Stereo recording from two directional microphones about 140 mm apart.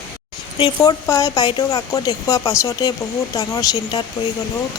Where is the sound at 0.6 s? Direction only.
35° left (ahead or behind).